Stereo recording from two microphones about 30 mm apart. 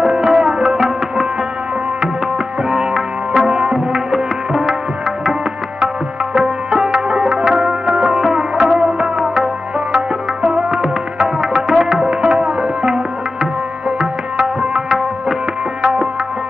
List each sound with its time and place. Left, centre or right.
0.0 s tabla: right
2.7 s tabla: right
6.3 s music: right
10.8 s music: right
15.8 s music: right